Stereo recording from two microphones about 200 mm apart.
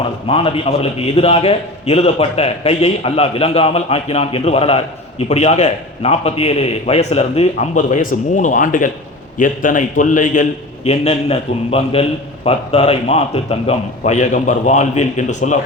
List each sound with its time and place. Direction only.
0.0 s a man's voice: 25° left (ahead or behind)